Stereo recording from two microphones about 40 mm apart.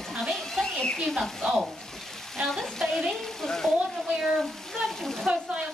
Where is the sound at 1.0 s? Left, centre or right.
Centre.